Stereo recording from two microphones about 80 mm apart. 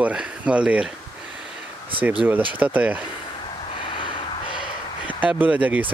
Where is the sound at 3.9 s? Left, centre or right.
Left.